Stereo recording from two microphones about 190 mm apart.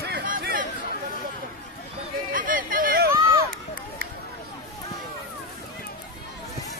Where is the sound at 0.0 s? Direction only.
60° right (ahead or behind).